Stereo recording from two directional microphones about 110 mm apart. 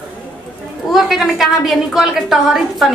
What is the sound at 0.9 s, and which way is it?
A woman's voice, centre (ahead or behind).